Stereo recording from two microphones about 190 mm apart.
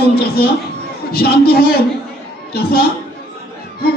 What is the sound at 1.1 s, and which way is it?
A man's voice, 55° left (ahead or behind).